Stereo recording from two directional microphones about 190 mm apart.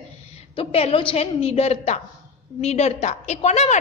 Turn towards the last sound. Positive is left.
turn(degrees=35)  # may be behind; listen again after turning